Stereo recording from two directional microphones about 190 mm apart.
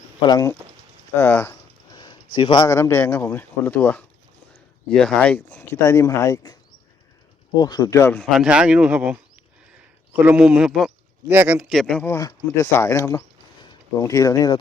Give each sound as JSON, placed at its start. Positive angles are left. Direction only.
{"t": 0.2, "sound": "speech", "side_deg": 20}
{"t": 1.1, "sound": "a sound", "side_deg": 15}
{"t": 2.0, "sound": "a sound", "side_deg": 25}
{"t": 2.7, "sound": "a man's voice", "side_deg": 15}
{"t": 5.5, "sound": "speech", "side_deg": 15}
{"t": 8.3, "sound": "a man's voice", "side_deg": -5}